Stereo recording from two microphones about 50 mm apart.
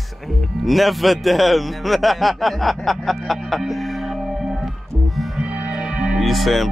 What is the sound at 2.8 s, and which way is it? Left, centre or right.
Music, centre.